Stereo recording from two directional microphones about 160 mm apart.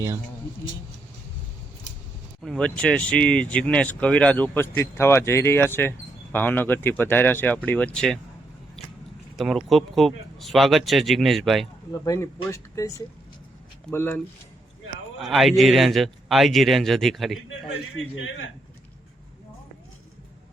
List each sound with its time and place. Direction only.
2.4 s speech: 5° left (ahead or behind)
9.3 s speech: centre (ahead or behind)
11.9 s speech: 20° left (ahead or behind)
13.9 s speech: 15° left (ahead or behind)
15.2 s speech: centre (ahead or behind)